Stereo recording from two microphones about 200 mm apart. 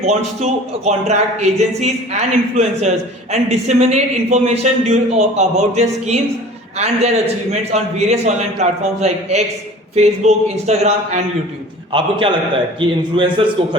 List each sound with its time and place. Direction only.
0.0 s a man's voice: 35° right (ahead or behind)